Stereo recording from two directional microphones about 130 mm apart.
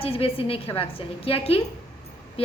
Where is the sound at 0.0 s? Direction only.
45° left (ahead or behind).